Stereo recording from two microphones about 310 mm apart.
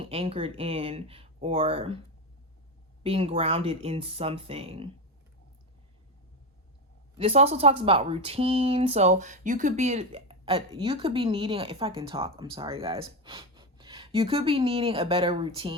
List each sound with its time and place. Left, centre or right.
0.0 s speech: centre
3.0 s speech: centre
7.2 s speech: centre